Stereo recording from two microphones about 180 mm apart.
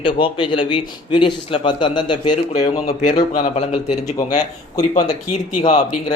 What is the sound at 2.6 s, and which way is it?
Speech, 35° left (ahead or behind).